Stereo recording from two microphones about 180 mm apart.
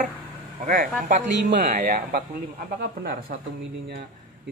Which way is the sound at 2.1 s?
55° right (ahead or behind).